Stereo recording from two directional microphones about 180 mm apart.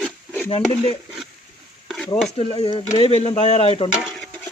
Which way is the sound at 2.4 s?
30° left (ahead or behind).